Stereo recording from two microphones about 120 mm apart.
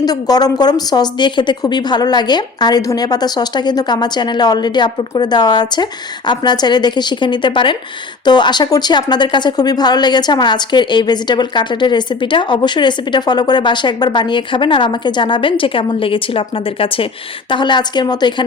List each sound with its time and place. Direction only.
0.0 s speech: 35° left (ahead or behind)